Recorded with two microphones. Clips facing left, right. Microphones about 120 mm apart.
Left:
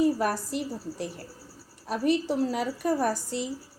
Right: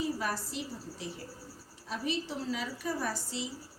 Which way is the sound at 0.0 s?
55° left (ahead or behind).